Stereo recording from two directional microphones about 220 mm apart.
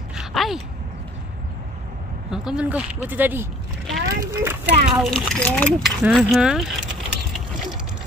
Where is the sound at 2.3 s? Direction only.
5° right (ahead or behind).